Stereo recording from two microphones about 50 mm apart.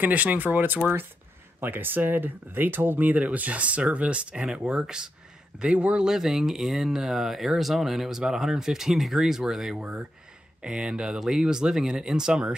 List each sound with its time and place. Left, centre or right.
0.0 s speech: right; by 5.1 s centre
5.6 s speech: right
6.0 s speech: centre
9.8 s speech: right